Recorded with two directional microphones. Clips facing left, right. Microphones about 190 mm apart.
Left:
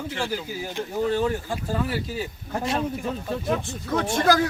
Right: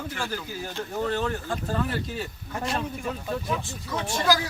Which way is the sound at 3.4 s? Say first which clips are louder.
Left 5 dB; 55° left (ahead or behind).